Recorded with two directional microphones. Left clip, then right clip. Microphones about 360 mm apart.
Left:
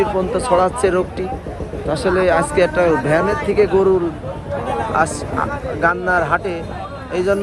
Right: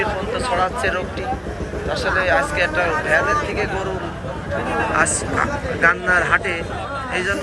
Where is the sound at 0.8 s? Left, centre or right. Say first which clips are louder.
Left 4 dB; centre.